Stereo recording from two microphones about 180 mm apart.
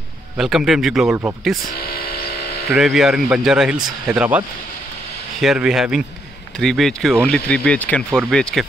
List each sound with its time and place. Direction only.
0.4 s speech: centre (ahead or behind)
1.8 s electric toothbrush: 55° left (ahead or behind)
2.7 s speech: centre (ahead or behind)